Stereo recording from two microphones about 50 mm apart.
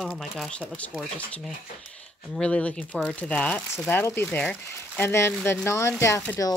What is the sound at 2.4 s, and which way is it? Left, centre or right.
Speech, left.